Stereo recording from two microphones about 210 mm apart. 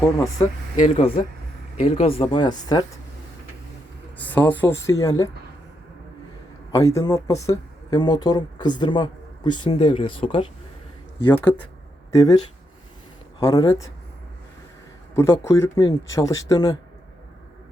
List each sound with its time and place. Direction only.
0.0 s speech: 15° left (ahead or behind)
0.8 s speech: 25° left (ahead or behind)
4.2 s speech: 10° left (ahead or behind)
6.7 s speech: 15° left (ahead or behind)
11.5 s speech: 10° left (ahead or behind)
13.4 s speech: 15° left (ahead or behind)
15.1 s speech: 15° left (ahead or behind)